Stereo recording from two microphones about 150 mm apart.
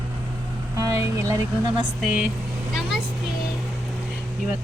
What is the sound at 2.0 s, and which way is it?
Speech, 5° right (ahead or behind).